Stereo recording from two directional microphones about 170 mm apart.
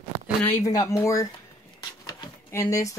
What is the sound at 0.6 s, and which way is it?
Speech, 20° left (ahead or behind).